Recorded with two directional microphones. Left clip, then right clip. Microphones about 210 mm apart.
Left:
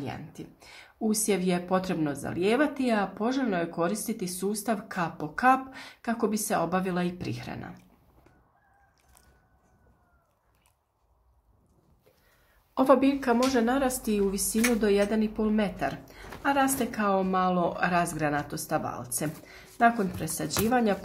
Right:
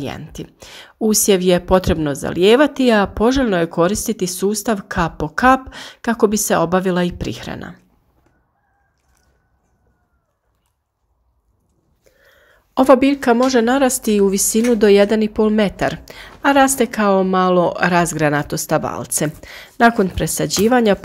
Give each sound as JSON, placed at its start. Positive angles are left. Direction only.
{"t": 0.0, "sound": "a woman's voice", "side_deg": -40}
{"t": 12.7, "sound": "a woman's voice", "side_deg": -35}